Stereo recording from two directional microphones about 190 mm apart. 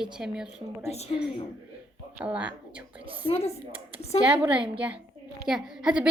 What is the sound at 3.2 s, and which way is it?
Speech, 30° left (ahead or behind).